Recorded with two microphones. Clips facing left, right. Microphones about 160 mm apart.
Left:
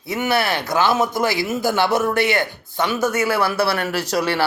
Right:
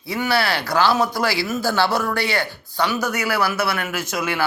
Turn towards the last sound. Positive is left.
turn(degrees=35)  # may be behind; listen again after turning